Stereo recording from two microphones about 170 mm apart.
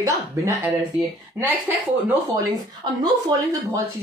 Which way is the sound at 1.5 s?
10° right (ahead or behind).